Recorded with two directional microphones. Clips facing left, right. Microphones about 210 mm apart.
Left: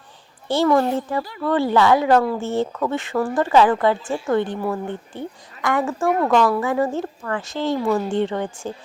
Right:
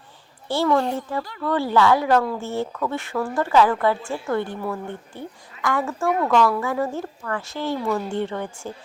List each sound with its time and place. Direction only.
0.4 s a child's voice: 20° left (ahead or behind)